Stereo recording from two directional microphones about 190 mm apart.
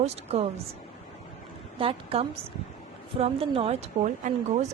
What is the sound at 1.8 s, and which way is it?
A woman's voice, 30° right (ahead or behind).